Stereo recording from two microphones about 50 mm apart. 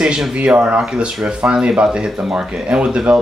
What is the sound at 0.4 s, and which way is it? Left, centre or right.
Speech, right.